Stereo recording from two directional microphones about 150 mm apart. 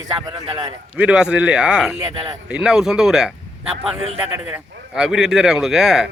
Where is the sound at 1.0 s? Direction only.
5° right (ahead or behind).